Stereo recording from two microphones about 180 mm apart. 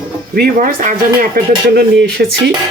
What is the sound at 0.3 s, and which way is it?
Speech, 55° right (ahead or behind).